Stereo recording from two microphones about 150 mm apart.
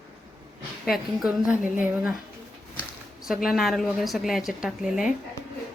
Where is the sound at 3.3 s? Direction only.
Centre (ahead or behind).